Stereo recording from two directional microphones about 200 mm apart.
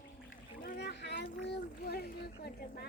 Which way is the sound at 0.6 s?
55° left (ahead or behind).